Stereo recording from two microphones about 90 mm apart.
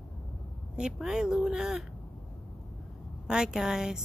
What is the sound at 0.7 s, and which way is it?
Speech, 5° right (ahead or behind).